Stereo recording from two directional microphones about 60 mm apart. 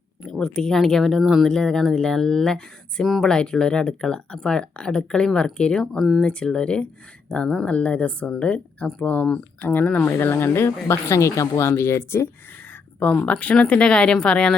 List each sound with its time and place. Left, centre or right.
0.3 s speech: centre
1.5 s speech: centre
3.2 s speech: centre
10.1 s speech: left
11.8 s speech: left
13.1 s speech: centre